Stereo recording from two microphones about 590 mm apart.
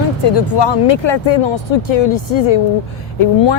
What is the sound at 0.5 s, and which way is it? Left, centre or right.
Speech, left.